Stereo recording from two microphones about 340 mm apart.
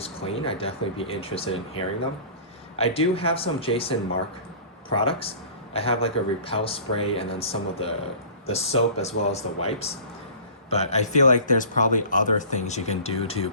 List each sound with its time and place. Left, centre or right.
0.0 s speech: centre
4.9 s speech: centre